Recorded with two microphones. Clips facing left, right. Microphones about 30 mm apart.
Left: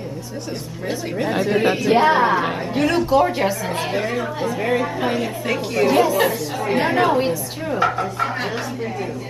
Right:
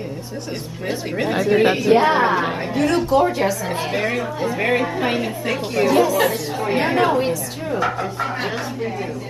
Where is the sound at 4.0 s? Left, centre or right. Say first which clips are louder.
Right 2 dB; centre.